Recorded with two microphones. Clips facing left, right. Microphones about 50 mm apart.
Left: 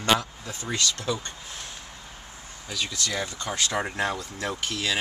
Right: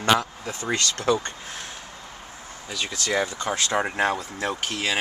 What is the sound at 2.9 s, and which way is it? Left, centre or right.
Speech, right.